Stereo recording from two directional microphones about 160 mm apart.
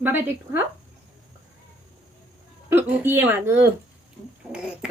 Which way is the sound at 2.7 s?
15° right (ahead or behind).